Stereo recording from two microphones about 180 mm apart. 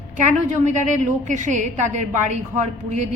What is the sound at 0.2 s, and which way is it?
A woman's voice, 40° right (ahead or behind).